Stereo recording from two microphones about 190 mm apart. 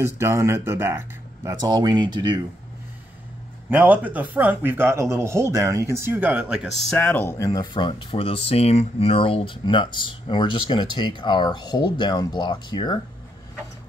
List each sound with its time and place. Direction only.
0.0 s speech: 15° right (ahead or behind)
3.7 s speech: 10° right (ahead or behind); by 13.0 s 20° left (ahead or behind)